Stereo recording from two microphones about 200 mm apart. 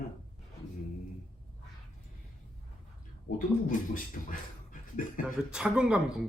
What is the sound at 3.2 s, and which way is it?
Speech, 40° left (ahead or behind).